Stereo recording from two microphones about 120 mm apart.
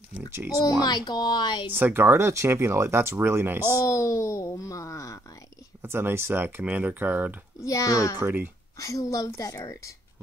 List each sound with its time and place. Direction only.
0.6 s speech: 35° left (ahead or behind)
1.7 s speech: 15° right (ahead or behind)
3.8 s speech: 25° left (ahead or behind)
5.8 s speech: 20° right (ahead or behind)
7.6 s speech: 25° left (ahead or behind)
8.2 s speech: 15° right (ahead or behind)
8.7 s speech: 30° left (ahead or behind)